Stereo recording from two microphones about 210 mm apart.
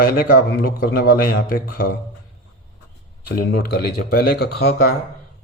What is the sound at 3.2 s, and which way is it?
A man's voice, 45° left (ahead or behind).